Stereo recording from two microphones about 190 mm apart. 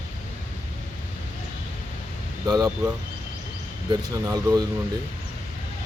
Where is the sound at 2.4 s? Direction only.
20° right (ahead or behind).